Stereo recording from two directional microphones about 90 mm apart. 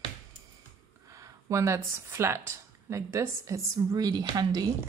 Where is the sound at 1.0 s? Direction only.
35° right (ahead or behind).